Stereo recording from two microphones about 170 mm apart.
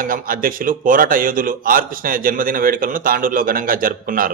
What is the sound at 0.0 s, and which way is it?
A man's voice, 55° right (ahead or behind).